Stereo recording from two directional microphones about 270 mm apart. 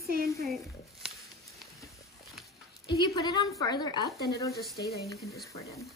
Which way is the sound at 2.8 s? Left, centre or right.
Centre.